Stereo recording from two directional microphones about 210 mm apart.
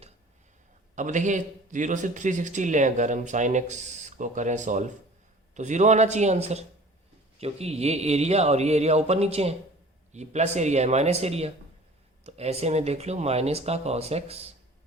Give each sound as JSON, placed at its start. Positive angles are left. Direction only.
{"t": 0.9, "sound": "a man's voice", "side_deg": -35}